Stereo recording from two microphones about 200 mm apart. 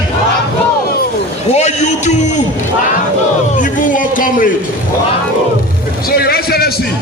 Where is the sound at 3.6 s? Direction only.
40° left (ahead or behind).